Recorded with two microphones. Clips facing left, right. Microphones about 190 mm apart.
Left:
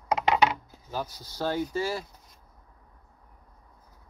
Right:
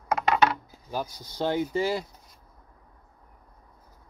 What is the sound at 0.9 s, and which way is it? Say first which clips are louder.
Speech: right 2 dB; 15° right (ahead or behind).